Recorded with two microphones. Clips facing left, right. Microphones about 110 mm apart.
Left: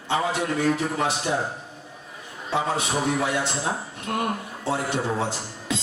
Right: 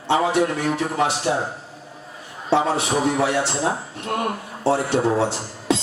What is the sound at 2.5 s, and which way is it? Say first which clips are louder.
A man's voice: right 6 dB; 30° right (ahead or behind).